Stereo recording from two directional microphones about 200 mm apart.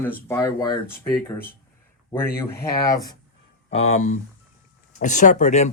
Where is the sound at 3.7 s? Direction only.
30° left (ahead or behind).